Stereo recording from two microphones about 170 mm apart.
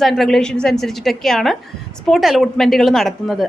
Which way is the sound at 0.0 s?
Centre (ahead or behind).